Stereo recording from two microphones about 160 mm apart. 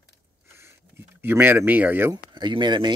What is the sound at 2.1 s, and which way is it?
Speech, 30° right (ahead or behind).